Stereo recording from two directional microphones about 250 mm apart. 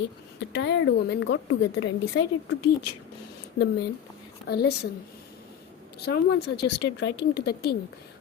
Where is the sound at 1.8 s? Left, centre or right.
Left.